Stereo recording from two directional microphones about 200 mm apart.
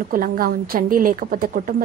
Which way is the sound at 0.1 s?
45° right (ahead or behind).